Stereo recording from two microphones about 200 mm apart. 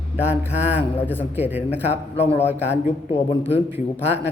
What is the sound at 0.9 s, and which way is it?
Speech, 10° left (ahead or behind).